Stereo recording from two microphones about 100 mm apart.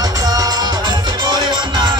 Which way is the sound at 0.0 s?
40° right (ahead or behind).